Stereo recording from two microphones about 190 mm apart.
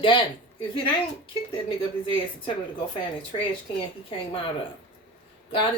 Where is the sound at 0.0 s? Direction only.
25° left (ahead or behind).